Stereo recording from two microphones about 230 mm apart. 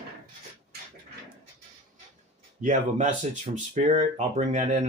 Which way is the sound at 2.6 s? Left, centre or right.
Right.